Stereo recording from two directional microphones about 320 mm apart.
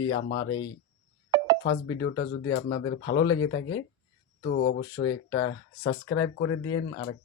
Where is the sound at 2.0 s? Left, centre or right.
Left.